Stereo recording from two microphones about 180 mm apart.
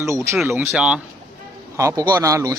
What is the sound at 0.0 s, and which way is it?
Speech, 15° right (ahead or behind).